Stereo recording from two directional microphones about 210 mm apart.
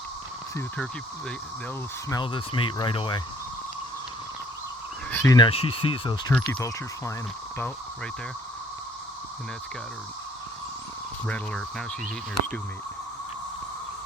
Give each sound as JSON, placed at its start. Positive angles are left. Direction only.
{"t": 2.0, "sound": "speech", "side_deg": 20}
{"t": 5.1, "sound": "speech", "side_deg": 15}
{"t": 6.3, "sound": "speech", "side_deg": 5}